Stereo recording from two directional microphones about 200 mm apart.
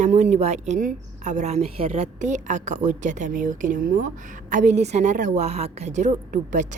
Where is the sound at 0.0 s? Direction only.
40° right (ahead or behind).